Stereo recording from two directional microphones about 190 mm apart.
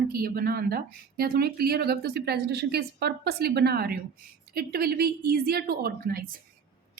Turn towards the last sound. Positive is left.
turn(degrees=-50)  # may be behind; listen again after turning